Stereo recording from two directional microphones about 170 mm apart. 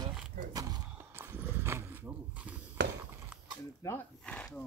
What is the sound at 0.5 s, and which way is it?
Horse, 20° right (ahead or behind).